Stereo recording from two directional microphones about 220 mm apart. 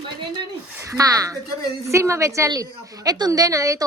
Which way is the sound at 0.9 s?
15° right (ahead or behind).